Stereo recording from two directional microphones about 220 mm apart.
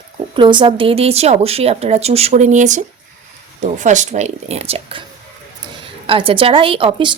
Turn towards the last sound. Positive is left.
turn(degrees=-20)  # may be behind; listen again after turning